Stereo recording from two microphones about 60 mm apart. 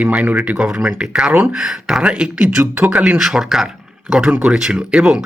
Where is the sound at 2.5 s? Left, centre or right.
Right.